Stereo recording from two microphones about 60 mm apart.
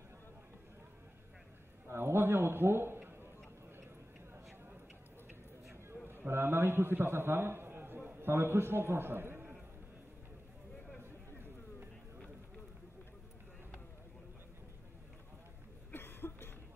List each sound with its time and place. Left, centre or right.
1.9 s a man's voice: right
6.0 s a man's voice: right
11.0 s a sound: right
15.9 s cough: left